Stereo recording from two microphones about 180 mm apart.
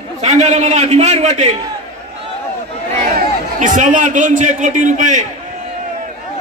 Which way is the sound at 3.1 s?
45° right (ahead or behind).